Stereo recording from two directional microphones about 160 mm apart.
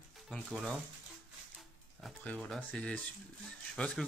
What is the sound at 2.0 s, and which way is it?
Speech, 5° left (ahead or behind).